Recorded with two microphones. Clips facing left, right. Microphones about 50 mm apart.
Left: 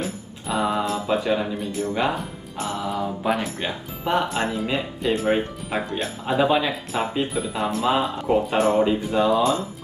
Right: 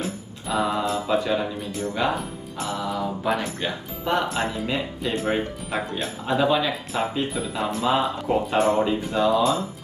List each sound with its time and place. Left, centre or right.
0.0 s music: centre
1.1 s speech: centre
4.3 s speech: centre
6.7 s speech: centre